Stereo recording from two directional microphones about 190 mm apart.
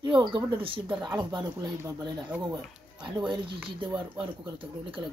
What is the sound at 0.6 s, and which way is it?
A woman's voice, 25° right (ahead or behind).